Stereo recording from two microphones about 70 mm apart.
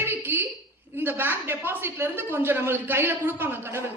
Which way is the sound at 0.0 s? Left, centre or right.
Right.